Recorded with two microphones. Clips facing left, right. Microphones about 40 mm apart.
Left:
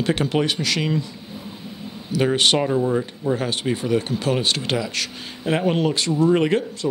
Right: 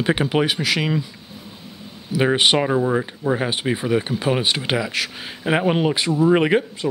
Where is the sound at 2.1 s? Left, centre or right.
Centre.